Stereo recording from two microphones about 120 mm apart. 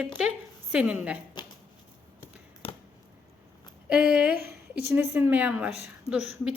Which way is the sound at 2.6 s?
50° left (ahead or behind).